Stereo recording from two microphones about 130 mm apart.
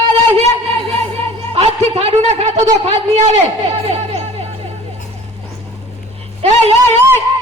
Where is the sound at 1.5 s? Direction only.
50° right (ahead or behind).